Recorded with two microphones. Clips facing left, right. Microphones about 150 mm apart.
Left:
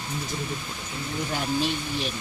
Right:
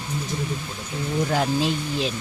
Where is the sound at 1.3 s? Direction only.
90° right.